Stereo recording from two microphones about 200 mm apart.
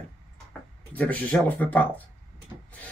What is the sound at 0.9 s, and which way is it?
Speech, 5° left (ahead or behind).